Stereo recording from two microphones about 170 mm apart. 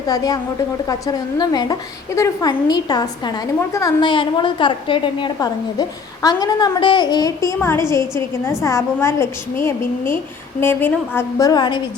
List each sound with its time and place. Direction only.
0.1 s a woman's voice: 20° left (ahead or behind)